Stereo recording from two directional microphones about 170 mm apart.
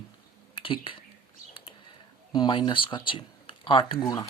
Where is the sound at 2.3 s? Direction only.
25° left (ahead or behind).